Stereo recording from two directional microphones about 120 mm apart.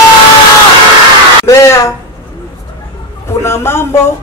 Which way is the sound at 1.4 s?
25° left (ahead or behind).